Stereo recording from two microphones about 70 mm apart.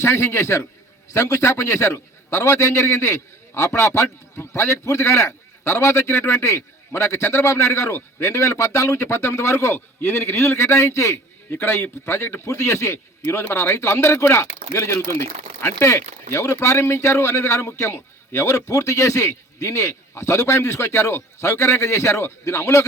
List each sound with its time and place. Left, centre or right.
0.0 s a man's voice: left